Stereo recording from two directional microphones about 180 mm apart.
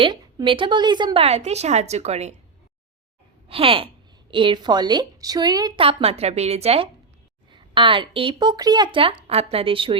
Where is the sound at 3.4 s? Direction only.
30° right (ahead or behind).